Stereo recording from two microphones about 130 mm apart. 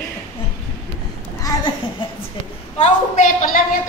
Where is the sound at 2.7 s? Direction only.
65° left (ahead or behind); by 3.6 s 80° left.